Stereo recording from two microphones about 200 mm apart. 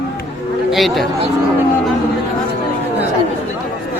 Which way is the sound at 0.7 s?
Centre (ahead or behind).